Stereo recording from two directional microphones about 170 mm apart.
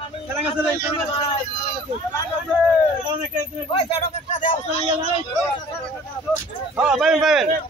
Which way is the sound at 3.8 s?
40° left (ahead or behind).